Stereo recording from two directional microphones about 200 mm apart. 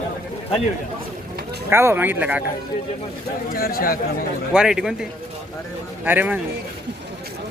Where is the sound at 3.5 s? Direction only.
50° left (ahead or behind).